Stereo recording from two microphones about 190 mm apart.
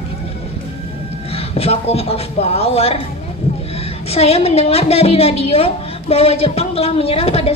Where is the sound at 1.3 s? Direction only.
30° left (ahead or behind).